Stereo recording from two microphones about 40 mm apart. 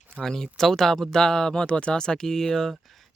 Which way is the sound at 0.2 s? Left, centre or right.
Centre.